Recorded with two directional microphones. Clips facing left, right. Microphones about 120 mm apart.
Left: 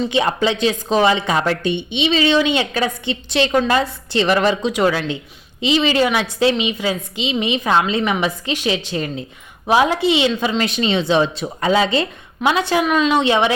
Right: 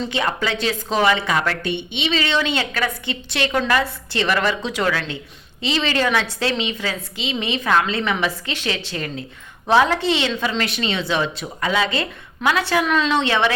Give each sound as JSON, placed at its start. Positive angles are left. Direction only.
{"t": 0.1, "sound": "a woman's voice", "side_deg": 20}